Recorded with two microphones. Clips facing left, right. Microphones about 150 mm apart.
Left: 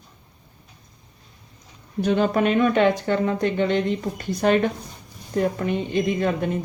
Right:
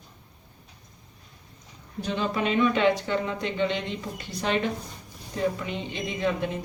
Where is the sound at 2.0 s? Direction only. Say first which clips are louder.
Left 8 dB; 55° left (ahead or behind).